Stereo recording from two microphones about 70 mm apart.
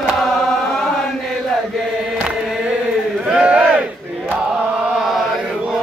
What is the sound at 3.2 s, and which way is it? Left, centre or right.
Crowd, centre.